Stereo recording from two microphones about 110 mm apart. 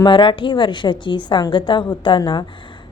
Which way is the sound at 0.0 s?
45° left (ahead or behind).